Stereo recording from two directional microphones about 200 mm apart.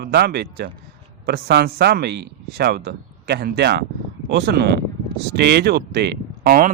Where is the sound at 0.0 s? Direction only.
50° right (ahead or behind).